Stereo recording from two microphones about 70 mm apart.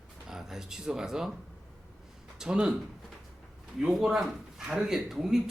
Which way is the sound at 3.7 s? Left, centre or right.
Centre.